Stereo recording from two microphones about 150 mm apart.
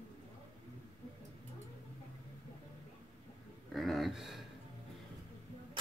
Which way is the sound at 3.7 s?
Centre (ahead or behind).